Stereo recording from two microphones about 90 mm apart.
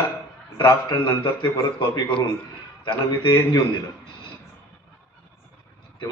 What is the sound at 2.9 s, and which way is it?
Speech, 65° left (ahead or behind).